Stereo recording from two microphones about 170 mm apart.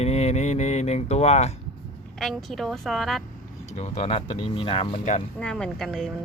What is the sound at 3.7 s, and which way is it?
Speech, 40° left (ahead or behind).